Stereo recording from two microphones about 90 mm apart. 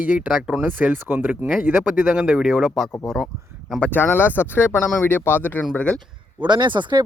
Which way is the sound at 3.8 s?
20° left (ahead or behind).